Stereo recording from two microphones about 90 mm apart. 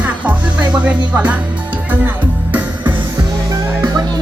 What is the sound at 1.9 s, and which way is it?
Music, 20° right (ahead or behind).